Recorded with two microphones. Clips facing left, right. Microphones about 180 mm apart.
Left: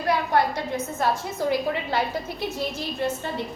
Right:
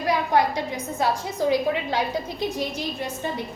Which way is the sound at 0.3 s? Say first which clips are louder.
Right 1 dB; 15° right (ahead or behind).